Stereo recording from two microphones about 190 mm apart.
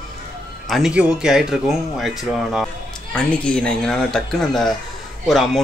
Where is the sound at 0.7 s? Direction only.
Centre (ahead or behind).